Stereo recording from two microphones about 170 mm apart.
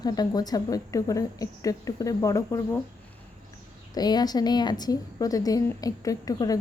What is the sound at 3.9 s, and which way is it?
A woman's voice, 25° left (ahead or behind).